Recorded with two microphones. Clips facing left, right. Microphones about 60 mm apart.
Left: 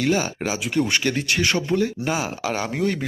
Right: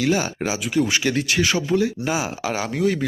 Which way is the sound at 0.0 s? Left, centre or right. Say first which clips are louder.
Right 1 dB; centre.